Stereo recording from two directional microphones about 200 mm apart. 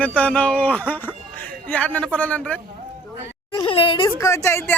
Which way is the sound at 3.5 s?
25° left (ahead or behind).